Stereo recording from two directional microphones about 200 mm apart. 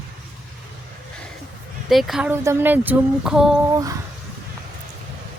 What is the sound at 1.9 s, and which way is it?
Speech, centre (ahead or behind).